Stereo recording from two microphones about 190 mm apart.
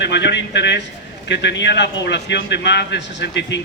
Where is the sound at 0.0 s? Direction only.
65° left (ahead or behind).